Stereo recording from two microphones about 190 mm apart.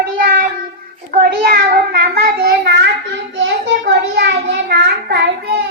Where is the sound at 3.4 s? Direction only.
80° right; by 5.3 s 60° right (ahead or behind).